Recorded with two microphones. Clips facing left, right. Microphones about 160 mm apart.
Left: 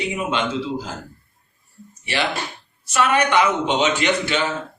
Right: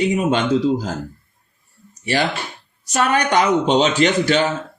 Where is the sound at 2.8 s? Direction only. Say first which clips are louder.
Even; 40° right (ahead or behind).